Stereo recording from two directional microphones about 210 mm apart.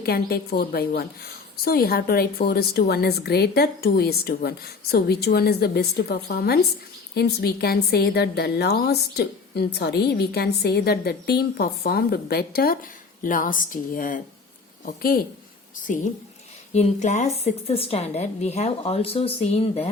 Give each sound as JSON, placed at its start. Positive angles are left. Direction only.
{"t": 0.0, "sound": "a woman's voice", "side_deg": 45}